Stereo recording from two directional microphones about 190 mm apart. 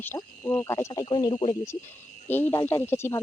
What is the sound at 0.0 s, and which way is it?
Speech, 10° left (ahead or behind).